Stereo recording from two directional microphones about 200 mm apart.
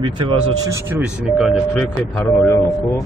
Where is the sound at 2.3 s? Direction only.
15° left (ahead or behind).